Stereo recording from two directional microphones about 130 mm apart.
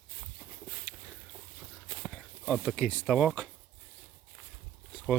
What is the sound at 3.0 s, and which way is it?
Speech, 5° right (ahead or behind).